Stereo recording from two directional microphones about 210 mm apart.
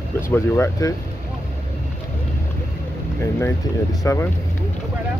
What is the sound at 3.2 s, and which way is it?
Speech, 15° left (ahead or behind).